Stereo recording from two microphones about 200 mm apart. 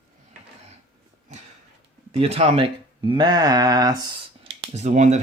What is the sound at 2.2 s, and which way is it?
Speech, 30° right (ahead or behind).